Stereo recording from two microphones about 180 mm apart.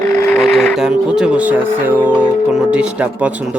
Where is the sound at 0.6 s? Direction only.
5° right (ahead or behind).